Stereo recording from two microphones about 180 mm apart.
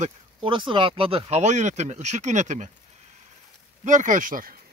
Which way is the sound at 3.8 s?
45° right (ahead or behind).